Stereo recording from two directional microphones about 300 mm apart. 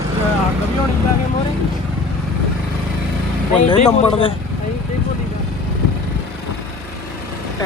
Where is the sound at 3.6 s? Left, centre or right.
Centre.